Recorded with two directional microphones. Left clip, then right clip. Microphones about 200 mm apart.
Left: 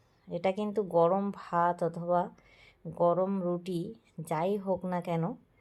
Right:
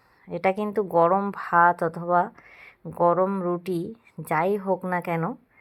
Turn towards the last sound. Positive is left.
turn(degrees=-10)  # may be behind; listen again after turning